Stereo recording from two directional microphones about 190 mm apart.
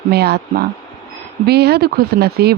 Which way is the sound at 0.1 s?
55° right (ahead or behind).